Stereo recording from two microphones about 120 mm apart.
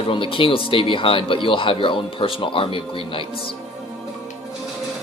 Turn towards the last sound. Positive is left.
turn(degrees=45)  # may be behind; listen again after turning